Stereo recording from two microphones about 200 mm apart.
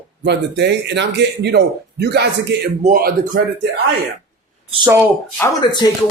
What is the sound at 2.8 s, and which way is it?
Speech, 45° right (ahead or behind).